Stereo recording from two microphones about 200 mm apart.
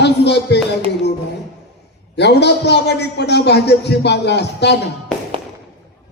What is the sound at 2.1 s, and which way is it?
Speech, 60° left (ahead or behind).